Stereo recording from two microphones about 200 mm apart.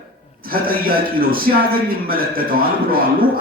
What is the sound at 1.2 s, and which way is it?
A man's voice, 45° right (ahead or behind).